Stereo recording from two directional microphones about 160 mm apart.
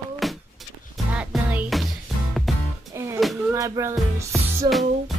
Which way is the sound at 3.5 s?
20° right (ahead or behind).